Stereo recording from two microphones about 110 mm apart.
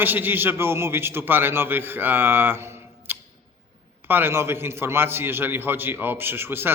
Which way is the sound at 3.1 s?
20° right (ahead or behind).